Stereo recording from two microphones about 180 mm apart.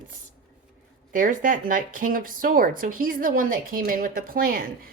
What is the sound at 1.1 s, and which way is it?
Speech, 50° right (ahead or behind).